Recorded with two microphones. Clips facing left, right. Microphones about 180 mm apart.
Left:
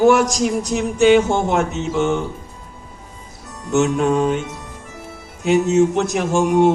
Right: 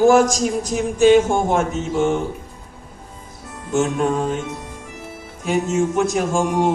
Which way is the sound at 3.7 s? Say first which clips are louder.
Left 3 dB; 75° left (ahead or behind).